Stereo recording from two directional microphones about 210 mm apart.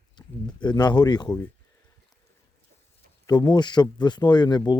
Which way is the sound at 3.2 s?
20° left (ahead or behind).